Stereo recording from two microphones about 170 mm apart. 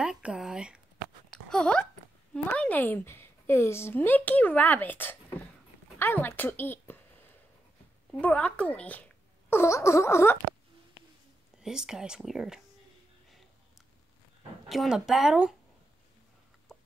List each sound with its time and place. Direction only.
0.0 s a woman's voice: 5° right (ahead or behind); by 7.0 s 10° left (ahead or behind)
8.1 s a woman's voice: 10° left (ahead or behind)
11.5 s speech: 5° right (ahead or behind)
14.7 s speech: centre (ahead or behind)